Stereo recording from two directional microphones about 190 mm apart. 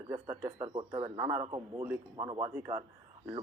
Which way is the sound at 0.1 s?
15° right (ahead or behind).